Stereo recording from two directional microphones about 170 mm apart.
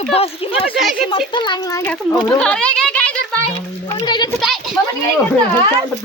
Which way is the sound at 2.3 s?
5° left (ahead or behind).